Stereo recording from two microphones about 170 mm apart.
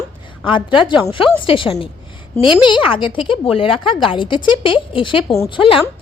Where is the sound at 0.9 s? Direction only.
30° left (ahead or behind).